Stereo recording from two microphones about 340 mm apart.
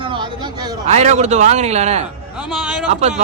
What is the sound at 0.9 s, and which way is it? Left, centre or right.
A man's voice, centre.